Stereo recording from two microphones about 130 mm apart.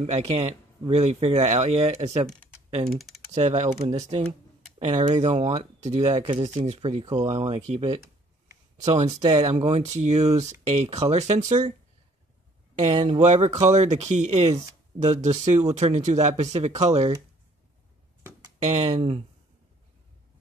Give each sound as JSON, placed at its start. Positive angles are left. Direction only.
{"t": 0.8, "sound": "speech", "side_deg": -55}
{"t": 3.3, "sound": "speech", "side_deg": -60}
{"t": 12.7, "sound": "speech", "side_deg": -60}
{"t": 18.7, "sound": "speech", "side_deg": -55}